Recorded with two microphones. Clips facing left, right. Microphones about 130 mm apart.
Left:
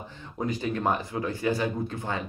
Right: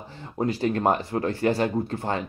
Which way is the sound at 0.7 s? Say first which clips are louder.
Right 4 dB; 60° right (ahead or behind).